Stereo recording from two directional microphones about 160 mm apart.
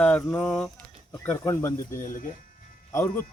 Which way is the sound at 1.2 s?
15° left (ahead or behind).